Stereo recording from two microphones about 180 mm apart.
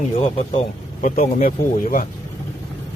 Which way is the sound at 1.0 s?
45° left (ahead or behind).